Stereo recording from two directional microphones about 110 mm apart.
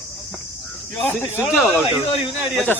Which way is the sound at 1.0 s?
20° left (ahead or behind).